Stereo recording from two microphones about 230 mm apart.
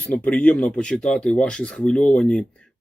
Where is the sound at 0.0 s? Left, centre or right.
Centre.